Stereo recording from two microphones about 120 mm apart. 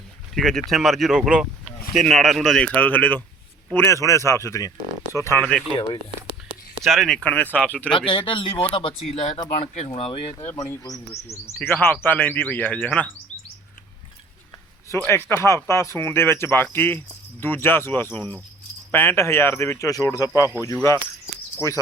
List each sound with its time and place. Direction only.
0.3 s speech: centre (ahead or behind)
3.8 s speech: 25° left (ahead or behind)
5.4 s speech: 10° left (ahead or behind)
6.8 s speech: centre (ahead or behind)
7.9 s speech: 45° left (ahead or behind)
9.5 s speech: 70° left (ahead or behind)
10.1 s speech: 50° left (ahead or behind)
10.3 s speech: 20° left (ahead or behind)
14.8 s speech: 20° left (ahead or behind)
19.9 s speech: 30° left (ahead or behind)